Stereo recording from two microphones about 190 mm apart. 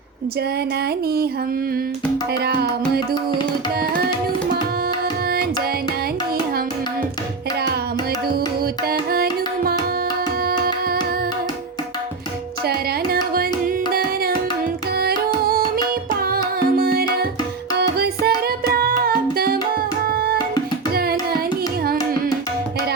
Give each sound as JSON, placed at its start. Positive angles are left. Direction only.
{"t": 2.4, "sound": "music", "side_deg": -55}
{"t": 8.3, "sound": "music", "side_deg": -55}
{"t": 10.4, "sound": "tabla", "side_deg": -50}
{"t": 12.6, "sound": "carnatic music", "side_deg": -50}
{"t": 14.9, "sound": "music", "side_deg": -55}
{"t": 16.7, "sound": "music", "side_deg": -50}
{"t": 20.1, "sound": "tabla", "side_deg": -50}
{"t": 20.9, "sound": "music", "side_deg": -55}